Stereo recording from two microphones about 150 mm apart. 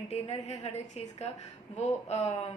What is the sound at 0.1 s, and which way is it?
A woman's voice, 45° left (ahead or behind).